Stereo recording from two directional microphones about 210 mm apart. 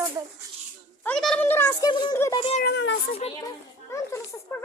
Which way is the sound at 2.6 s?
55° left (ahead or behind).